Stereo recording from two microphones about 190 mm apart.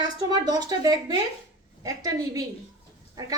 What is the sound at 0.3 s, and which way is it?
A woman's voice, 20° right (ahead or behind).